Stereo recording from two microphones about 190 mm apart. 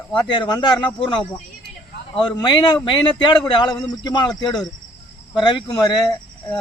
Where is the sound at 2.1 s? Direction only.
25° left (ahead or behind).